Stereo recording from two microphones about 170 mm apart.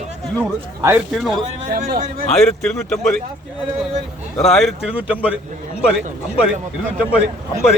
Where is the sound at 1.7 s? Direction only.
60° right (ahead or behind).